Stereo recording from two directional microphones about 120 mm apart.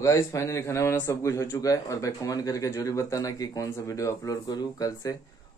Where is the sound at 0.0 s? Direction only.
25° left (ahead or behind).